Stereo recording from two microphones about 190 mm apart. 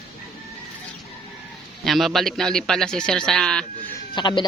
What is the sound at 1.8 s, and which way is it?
A man's voice, centre (ahead or behind).